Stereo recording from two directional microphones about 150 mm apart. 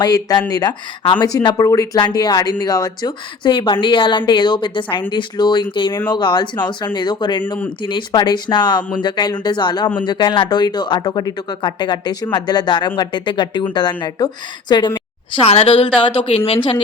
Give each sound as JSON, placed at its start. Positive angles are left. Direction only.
{"t": 0.0, "sound": "speech", "side_deg": 25}
{"t": 15.4, "sound": "speech", "side_deg": 40}